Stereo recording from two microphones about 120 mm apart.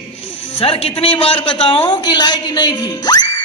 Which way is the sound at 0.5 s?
50° left (ahead or behind).